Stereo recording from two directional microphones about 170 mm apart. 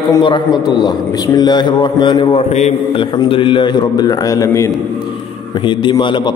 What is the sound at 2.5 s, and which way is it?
A man's voice, 40° left (ahead or behind).